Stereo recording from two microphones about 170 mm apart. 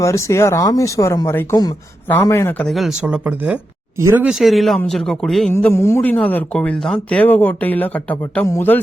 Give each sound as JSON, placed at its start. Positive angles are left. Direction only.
{"t": 0.0, "sound": "speech", "side_deg": 15}